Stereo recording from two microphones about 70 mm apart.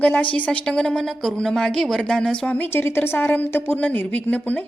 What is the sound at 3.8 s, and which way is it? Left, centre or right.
Speech, left.